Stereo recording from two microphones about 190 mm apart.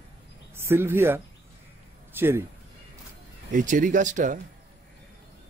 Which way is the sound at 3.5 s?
45° right (ahead or behind).